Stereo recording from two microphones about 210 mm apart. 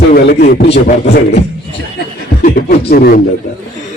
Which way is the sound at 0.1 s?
45° left (ahead or behind).